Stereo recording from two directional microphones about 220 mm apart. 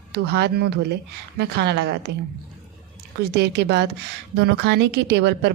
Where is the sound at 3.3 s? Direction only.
50° right (ahead or behind).